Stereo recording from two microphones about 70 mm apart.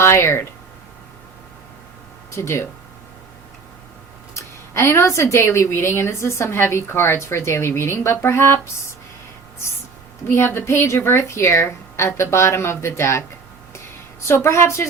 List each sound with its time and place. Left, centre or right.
0.0 s speech: left
2.3 s a woman's voice: left
4.4 s a woman's voice: left
10.2 s a woman's voice: left
13.7 s a sound: left